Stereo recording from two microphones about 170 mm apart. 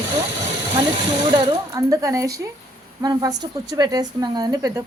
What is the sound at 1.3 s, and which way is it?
Speech, 25° right (ahead or behind).